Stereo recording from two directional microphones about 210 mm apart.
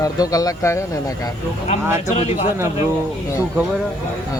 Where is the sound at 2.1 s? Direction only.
35° left (ahead or behind).